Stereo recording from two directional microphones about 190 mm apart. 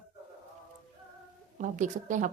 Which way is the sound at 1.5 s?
40° right (ahead or behind).